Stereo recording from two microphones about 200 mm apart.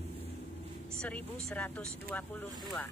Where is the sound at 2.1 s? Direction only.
5° left (ahead or behind).